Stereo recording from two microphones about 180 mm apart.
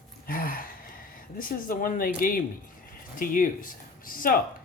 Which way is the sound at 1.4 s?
50° left (ahead or behind).